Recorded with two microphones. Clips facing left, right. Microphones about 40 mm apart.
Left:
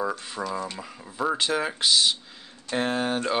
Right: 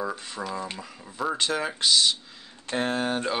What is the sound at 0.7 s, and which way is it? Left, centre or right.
Speech, centre.